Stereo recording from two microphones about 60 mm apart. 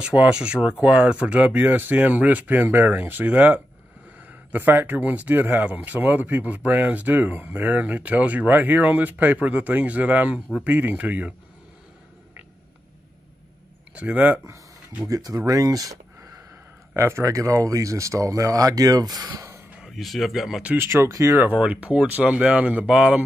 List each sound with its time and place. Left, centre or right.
0.0 s speech: centre
1.5 s speech: right
13.9 s speech: right
15.0 s speech: right
16.9 s speech: right
19.9 s speech: centre
20.7 s speech: right
21.1 s speech: right
21.4 s speech: right